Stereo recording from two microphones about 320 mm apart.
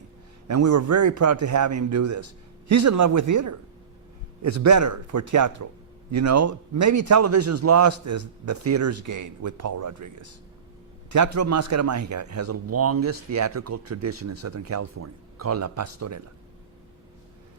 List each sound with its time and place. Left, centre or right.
0.4 s a man's voice: right